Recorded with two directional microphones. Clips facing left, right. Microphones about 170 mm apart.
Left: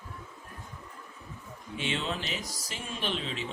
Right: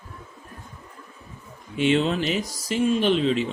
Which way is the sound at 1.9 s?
80° right.